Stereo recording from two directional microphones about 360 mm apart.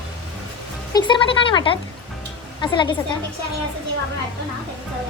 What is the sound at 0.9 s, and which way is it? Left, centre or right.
A woman's voice, centre.